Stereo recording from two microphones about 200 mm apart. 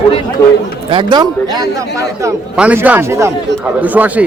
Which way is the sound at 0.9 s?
25° right (ahead or behind).